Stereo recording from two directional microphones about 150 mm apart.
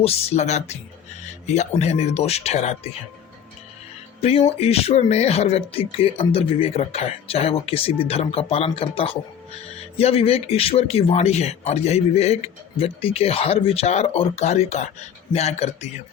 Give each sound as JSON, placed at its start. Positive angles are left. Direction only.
{"t": 0.0, "sound": "a man's voice", "side_deg": 45}
{"t": 4.2, "sound": "a man's voice", "side_deg": 40}